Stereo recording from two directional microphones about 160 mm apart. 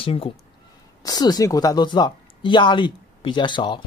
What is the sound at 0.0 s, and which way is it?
Speech, 35° left (ahead or behind).